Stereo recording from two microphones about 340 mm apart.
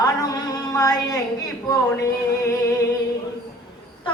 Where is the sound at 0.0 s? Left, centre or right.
Centre.